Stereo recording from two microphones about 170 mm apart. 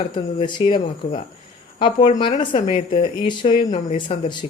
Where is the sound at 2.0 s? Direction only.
45° left (ahead or behind).